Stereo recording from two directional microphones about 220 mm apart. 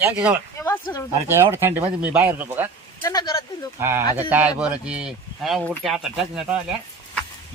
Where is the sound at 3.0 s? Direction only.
20° left (ahead or behind).